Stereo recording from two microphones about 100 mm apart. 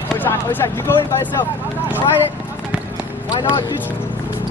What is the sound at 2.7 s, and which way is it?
Basketball bounce, 10° right (ahead or behind).